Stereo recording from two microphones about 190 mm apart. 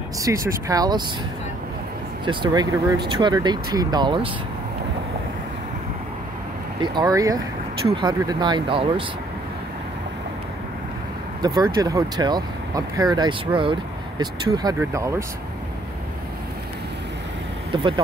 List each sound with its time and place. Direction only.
0.2 s speech: 15° right (ahead or behind)
2.2 s speech: 25° right (ahead or behind)
6.8 s speech: 20° right (ahead or behind)
11.4 s speech: 20° right (ahead or behind)
17.6 s speech: 25° right (ahead or behind)